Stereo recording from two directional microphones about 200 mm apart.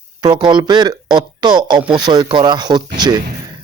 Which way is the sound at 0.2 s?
20° right (ahead or behind).